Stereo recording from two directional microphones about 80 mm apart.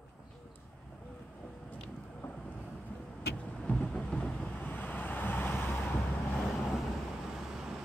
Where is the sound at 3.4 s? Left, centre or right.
Centre.